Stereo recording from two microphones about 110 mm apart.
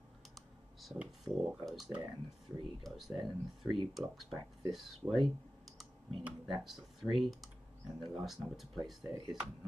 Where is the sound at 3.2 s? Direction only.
45° right (ahead or behind).